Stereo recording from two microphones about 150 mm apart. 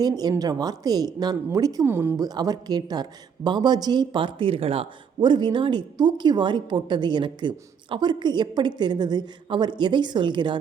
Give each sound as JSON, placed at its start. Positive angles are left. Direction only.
{"t": 0.0, "sound": "speech", "side_deg": -25}